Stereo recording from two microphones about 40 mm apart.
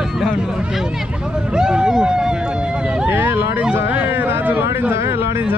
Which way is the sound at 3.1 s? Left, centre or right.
Right.